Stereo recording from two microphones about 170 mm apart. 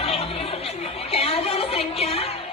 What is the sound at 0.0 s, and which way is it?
Chatter, 35° left (ahead or behind).